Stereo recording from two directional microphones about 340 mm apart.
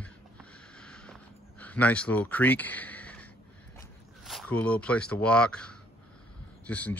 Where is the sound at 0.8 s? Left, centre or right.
Centre.